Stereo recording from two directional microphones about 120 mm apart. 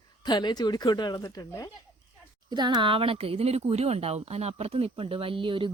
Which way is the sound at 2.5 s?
40° right (ahead or behind).